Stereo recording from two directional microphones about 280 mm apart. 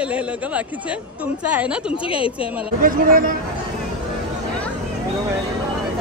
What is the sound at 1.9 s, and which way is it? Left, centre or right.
Speech, centre.